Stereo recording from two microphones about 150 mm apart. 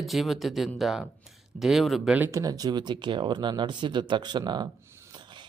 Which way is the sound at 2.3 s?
25° right (ahead or behind).